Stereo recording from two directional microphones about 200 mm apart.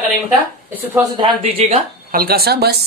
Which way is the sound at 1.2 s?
25° right (ahead or behind).